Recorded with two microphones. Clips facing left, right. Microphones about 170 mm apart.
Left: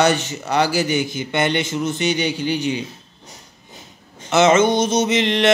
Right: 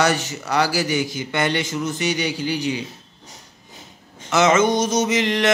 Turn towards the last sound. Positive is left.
turn(degrees=25)  # may be behind; listen again after turning